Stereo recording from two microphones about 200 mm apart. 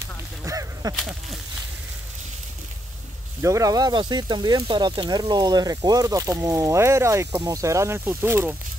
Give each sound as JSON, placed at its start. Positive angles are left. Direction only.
{"t": 0.4, "sound": "a sound", "side_deg": -15}
{"t": 0.9, "sound": "speech", "side_deg": 0}
{"t": 3.4, "sound": "speech", "side_deg": -15}